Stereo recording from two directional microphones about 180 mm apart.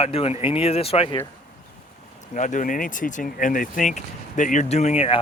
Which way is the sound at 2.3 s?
45° left (ahead or behind).